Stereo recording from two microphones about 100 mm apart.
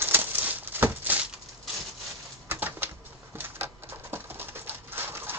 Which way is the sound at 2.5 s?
20° right (ahead or behind).